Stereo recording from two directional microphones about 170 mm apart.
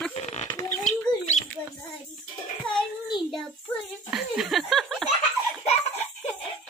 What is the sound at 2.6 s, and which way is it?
Child singing, centre (ahead or behind).